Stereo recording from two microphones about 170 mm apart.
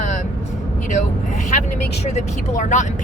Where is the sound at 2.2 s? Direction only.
45° left (ahead or behind).